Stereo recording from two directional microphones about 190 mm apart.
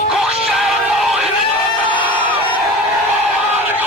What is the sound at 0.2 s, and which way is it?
Music, centre (ahead or behind).